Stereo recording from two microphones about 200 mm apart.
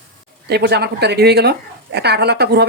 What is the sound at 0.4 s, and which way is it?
Speech, 55° right (ahead or behind).